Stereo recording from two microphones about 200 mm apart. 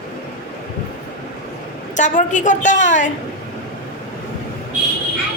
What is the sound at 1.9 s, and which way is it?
A woman's voice, 40° left (ahead or behind).